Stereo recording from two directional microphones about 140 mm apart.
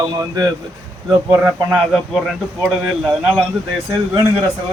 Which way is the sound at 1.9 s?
Centre (ahead or behind).